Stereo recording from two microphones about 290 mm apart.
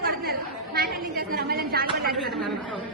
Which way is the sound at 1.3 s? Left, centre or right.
Right.